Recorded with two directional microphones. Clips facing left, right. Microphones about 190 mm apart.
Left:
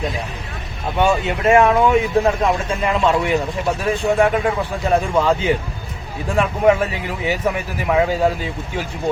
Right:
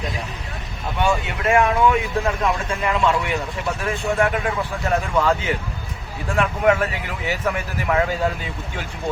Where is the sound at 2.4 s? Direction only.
25° left (ahead or behind).